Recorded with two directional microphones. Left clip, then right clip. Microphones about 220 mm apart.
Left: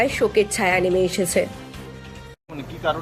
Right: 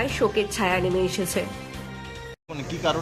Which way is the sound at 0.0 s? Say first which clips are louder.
Left 5 dB; 15° left (ahead or behind).